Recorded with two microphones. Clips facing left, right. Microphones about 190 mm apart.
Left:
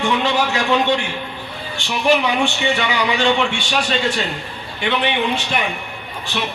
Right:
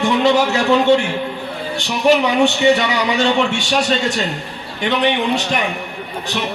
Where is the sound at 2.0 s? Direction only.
40° right (ahead or behind).